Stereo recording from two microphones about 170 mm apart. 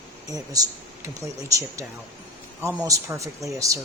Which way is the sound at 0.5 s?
20° right (ahead or behind).